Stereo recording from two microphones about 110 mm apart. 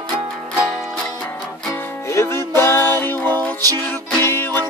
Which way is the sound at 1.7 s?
25° left (ahead or behind).